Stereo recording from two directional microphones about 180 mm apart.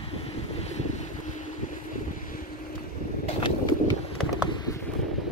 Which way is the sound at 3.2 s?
25° left (ahead or behind).